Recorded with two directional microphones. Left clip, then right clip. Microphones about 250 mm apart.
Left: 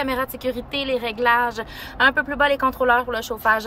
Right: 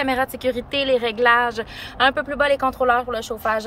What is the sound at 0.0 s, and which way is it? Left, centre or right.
Speech, centre.